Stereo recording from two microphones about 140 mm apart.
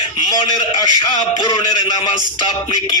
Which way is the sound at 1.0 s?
30° left (ahead or behind).